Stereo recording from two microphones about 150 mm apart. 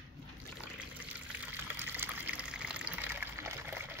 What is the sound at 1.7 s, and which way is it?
Water, 15° right (ahead or behind).